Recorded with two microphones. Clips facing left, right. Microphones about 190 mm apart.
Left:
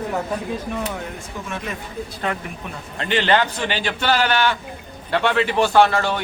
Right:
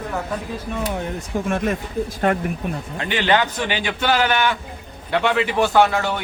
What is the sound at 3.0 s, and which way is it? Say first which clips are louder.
A man's voice: left 1 dB; 10° right (ahead or behind).